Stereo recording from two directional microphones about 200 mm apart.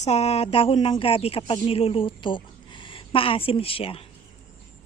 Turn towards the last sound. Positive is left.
turn(degrees=30)  # may be behind; listen again after turning